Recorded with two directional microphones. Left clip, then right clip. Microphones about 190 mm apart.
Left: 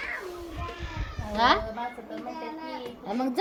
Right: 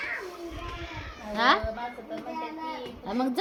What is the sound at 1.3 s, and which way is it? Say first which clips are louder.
Speech: even; 5° right (ahead or behind).